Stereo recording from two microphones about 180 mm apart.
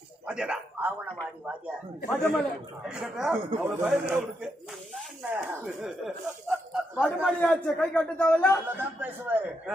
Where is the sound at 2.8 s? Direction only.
5° right (ahead or behind).